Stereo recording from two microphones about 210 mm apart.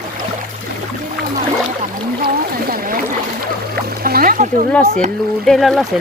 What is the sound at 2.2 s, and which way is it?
Boat, 45° right (ahead or behind).